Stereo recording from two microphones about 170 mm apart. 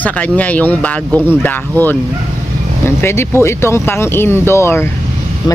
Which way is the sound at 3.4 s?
15° left (ahead or behind).